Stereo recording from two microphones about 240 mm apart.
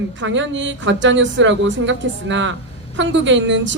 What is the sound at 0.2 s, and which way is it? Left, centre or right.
A woman's voice, right.